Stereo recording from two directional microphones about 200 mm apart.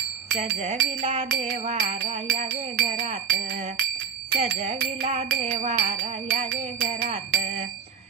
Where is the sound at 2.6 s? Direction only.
35° right (ahead or behind).